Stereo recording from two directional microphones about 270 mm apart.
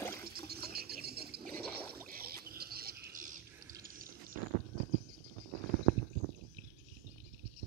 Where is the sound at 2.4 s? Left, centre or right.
Right.